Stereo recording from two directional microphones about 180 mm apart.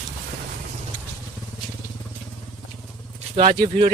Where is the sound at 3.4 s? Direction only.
30° right (ahead or behind).